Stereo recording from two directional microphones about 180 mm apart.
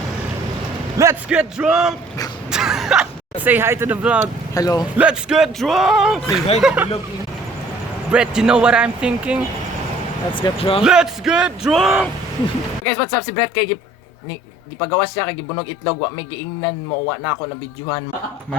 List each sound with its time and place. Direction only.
0.9 s a man's voice: 10° right (ahead or behind)
4.5 s a man's voice: 20° left (ahead or behind)
4.9 s speech: 5° right (ahead or behind)
8.1 s speech: 5° right (ahead or behind)
10.3 s a man's voice: 30° left (ahead or behind)
10.8 s speech: 5° right (ahead or behind)
12.8 s a man's voice: 15° left (ahead or behind)
14.8 s a man's voice: 15° left (ahead or behind)